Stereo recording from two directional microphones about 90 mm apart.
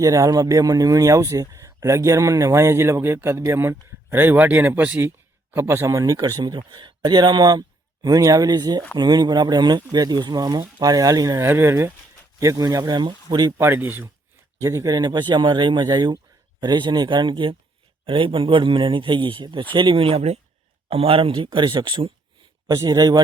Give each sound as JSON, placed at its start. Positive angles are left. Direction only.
{"t": 0.0, "sound": "speech", "side_deg": -40}
{"t": 11.3, "sound": "speech", "side_deg": -25}
{"t": 13.6, "sound": "speech", "side_deg": -25}
{"t": 14.6, "sound": "a man's voice", "side_deg": -35}
{"t": 22.6, "sound": "speech", "side_deg": -40}